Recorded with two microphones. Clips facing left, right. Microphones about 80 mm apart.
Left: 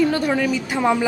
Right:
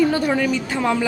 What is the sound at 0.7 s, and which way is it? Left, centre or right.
Speech, centre.